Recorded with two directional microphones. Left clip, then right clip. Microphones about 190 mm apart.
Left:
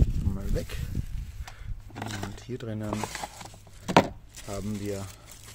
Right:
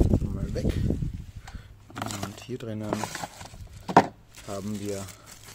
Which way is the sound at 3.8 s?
40° left (ahead or behind).